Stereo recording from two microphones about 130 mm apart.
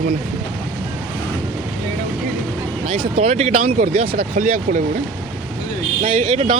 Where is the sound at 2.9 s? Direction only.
50° right (ahead or behind); by 4.8 s 85° right.